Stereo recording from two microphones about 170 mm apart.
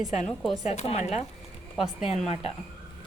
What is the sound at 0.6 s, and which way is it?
Speech, 40° left (ahead or behind).